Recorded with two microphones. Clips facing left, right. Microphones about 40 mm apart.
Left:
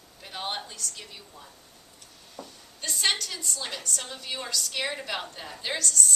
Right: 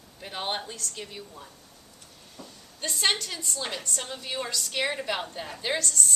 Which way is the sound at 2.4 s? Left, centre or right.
Right.